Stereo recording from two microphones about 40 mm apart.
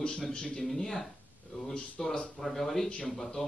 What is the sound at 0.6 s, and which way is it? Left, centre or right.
Speech, centre.